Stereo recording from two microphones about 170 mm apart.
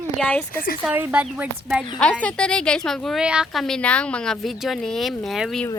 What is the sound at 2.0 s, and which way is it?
A woman's voice, 5° left (ahead or behind).